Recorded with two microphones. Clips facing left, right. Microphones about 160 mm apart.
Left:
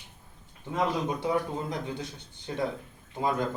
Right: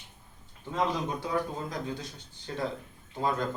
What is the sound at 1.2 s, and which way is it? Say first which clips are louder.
Speech: left 3 dB; 20° left (ahead or behind).